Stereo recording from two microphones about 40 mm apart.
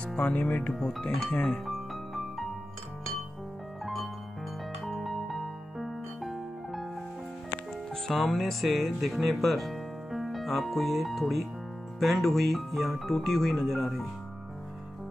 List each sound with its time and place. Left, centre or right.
0.0 s speech: left
1.7 s music: centre
4.8 s music: centre
8.1 s speech: centre